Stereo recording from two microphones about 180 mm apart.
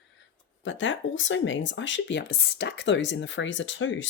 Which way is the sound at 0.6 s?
90° left.